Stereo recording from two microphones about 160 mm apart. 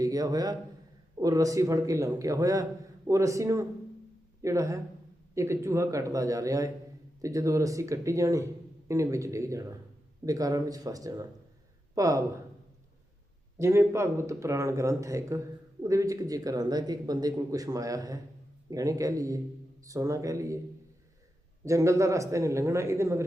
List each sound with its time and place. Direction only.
0.0 s a man's voice: 20° right (ahead or behind)
13.6 s speech: 15° right (ahead or behind)
21.6 s speech: 20° right (ahead or behind)